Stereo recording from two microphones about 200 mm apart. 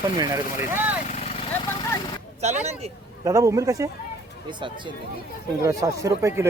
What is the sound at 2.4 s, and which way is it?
Speech, 35° right (ahead or behind).